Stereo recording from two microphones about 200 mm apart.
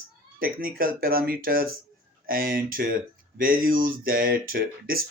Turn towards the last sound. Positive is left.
turn(degrees=-45)  # may be behind; listen again after turning